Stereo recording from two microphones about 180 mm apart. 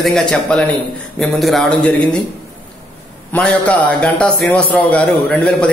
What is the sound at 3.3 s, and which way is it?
A man's voice, 10° left (ahead or behind).